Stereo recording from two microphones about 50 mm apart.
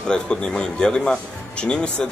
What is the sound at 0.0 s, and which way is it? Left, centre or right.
Speech, centre.